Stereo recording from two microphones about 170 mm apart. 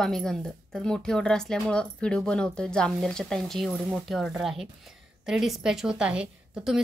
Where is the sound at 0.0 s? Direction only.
5° left (ahead or behind).